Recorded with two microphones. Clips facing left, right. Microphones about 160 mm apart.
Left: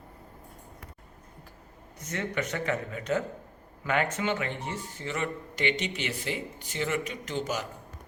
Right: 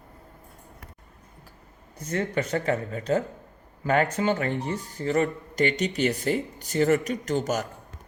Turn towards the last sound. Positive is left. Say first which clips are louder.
# right 6 dB
turn(degrees=-45)  # may be behind; listen again after turning